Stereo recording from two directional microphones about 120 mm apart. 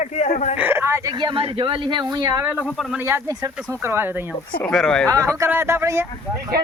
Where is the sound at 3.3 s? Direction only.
30° right (ahead or behind).